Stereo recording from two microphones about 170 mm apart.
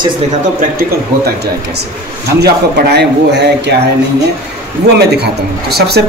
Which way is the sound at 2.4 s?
75° right (ahead or behind).